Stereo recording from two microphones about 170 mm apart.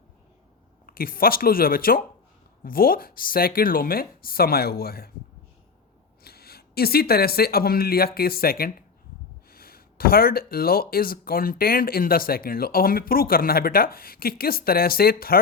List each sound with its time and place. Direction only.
0.9 s speech: 55° left (ahead or behind)
6.2 s speech: 65° left (ahead or behind)